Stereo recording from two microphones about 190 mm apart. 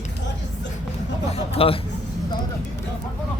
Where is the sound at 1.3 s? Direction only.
30° left (ahead or behind).